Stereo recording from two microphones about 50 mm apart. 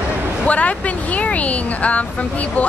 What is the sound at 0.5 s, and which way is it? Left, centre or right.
Speech, left.